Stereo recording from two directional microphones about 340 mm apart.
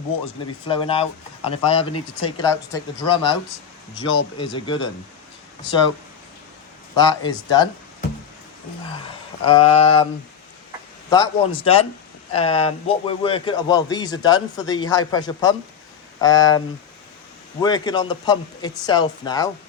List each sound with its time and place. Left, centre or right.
0.7 s a man's voice: centre
6.9 s a man's voice: centre
9.4 s a man's voice: centre
11.6 s a man's voice: centre